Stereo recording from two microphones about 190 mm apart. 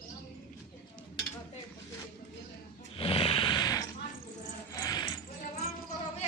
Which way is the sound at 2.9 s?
30° left (ahead or behind).